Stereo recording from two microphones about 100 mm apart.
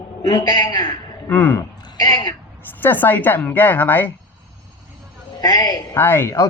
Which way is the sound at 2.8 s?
20° left (ahead or behind).